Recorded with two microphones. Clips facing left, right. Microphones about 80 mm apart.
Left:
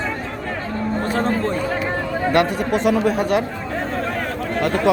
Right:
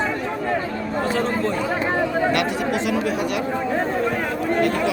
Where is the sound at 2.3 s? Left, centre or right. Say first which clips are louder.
Left 3 dB; left.